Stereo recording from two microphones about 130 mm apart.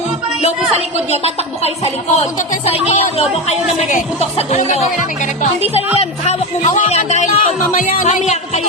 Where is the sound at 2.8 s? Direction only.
50° left (ahead or behind).